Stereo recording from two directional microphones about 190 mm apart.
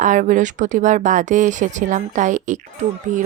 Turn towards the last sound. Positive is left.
turn(degrees=-40)  # may be behind; listen again after turning